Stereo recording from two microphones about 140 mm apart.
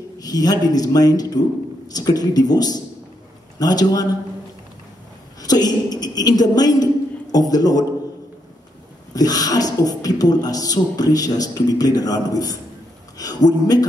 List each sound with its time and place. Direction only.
0.2 s speech: 25° left (ahead or behind)
5.4 s a woman's voice: 30° left (ahead or behind)
9.1 s speech: 25° left (ahead or behind)